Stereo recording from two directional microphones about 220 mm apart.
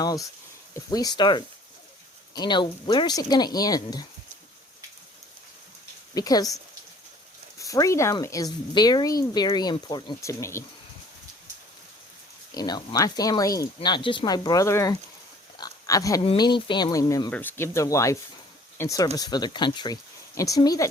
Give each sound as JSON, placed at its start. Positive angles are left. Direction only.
{"t": 0.0, "sound": "speech", "side_deg": 15}
{"t": 6.1, "sound": "speech", "side_deg": 15}
{"t": 7.6, "sound": "speech", "side_deg": 15}
{"t": 12.5, "sound": "speech", "side_deg": 20}
{"t": 15.5, "sound": "a sound", "side_deg": 15}
{"t": 16.2, "sound": "speech", "side_deg": 25}